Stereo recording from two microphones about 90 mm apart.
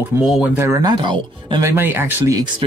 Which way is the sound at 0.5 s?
30° right (ahead or behind).